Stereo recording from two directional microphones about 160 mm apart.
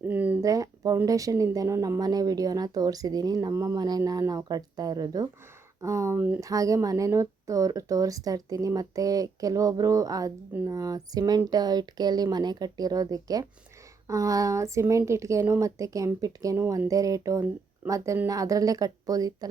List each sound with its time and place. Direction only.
0.1 s speech: 10° right (ahead or behind)
0.4 s a woman's voice: 20° right (ahead or behind)